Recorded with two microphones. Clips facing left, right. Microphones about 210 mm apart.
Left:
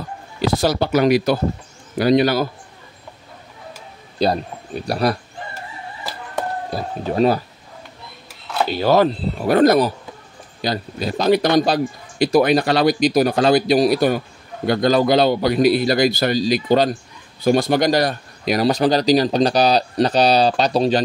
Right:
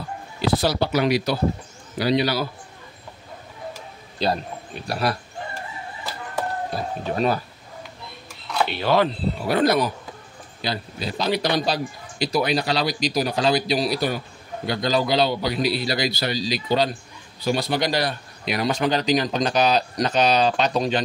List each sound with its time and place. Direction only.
0.4 s speech: 45° left (ahead or behind)
4.2 s speech: 40° left (ahead or behind)
6.7 s speech: 35° left (ahead or behind)
8.6 s speech: 40° left (ahead or behind)